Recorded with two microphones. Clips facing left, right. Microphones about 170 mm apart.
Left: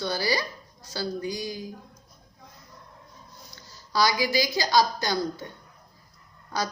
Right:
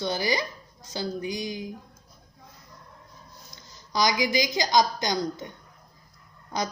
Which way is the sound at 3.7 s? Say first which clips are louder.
Left 1 dB; 20° right (ahead or behind).